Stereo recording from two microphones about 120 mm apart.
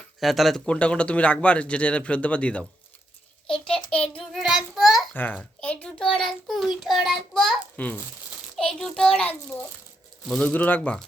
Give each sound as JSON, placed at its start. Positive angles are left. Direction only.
{"t": 0.2, "sound": "speech", "side_deg": 0}
{"t": 3.4, "sound": "a sound", "side_deg": 5}
{"t": 3.8, "sound": "child singing", "side_deg": 10}
{"t": 4.2, "sound": "child singing", "side_deg": 0}
{"t": 5.1, "sound": "a sound", "side_deg": 15}
{"t": 6.8, "sound": "child singing", "side_deg": 0}
{"t": 8.5, "sound": "a child's voice", "side_deg": 5}